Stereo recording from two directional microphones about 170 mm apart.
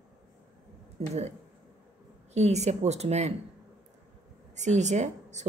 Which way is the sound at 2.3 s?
40° right (ahead or behind).